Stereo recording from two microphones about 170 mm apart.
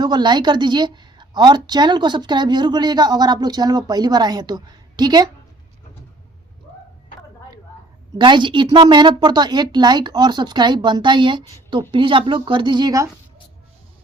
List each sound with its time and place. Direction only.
0.0 s a woman's voice: 25° right (ahead or behind)
8.2 s a woman's voice: 25° right (ahead or behind)